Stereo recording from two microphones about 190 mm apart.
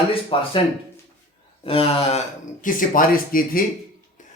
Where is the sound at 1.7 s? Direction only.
30° left (ahead or behind).